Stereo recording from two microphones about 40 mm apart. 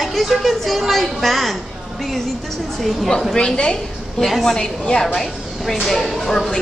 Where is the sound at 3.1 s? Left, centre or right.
Centre.